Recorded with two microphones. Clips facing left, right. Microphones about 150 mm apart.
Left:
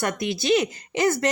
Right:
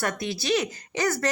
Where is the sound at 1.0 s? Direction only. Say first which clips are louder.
Left 4 dB; 20° left (ahead or behind).